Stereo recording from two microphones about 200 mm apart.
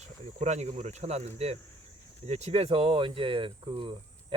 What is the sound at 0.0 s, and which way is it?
Speech, 35° right (ahead or behind).